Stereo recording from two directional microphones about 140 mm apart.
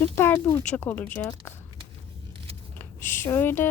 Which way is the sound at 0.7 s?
10° left (ahead or behind).